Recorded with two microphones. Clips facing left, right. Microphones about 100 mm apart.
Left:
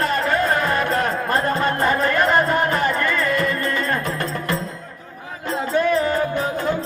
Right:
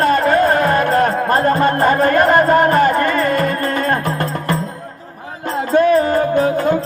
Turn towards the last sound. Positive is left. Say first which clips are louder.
# right 6 dB
turn(degrees=-45)  # may be behind; listen again after turning